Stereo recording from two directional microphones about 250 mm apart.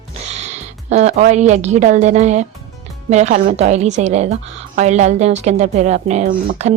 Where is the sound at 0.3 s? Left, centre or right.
Right.